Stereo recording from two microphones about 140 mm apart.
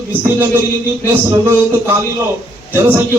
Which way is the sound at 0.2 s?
20° right (ahead or behind).